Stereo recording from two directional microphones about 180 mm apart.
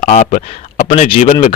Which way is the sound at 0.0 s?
40° left (ahead or behind).